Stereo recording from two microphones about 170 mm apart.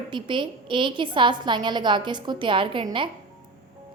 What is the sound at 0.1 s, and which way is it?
A woman's voice, 30° right (ahead or behind).